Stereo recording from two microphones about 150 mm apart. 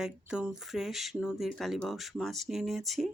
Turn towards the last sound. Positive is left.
turn(degrees=0)  # may be behind; listen again after turning